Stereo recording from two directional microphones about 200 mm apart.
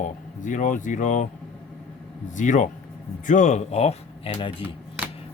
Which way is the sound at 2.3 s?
40° left (ahead or behind).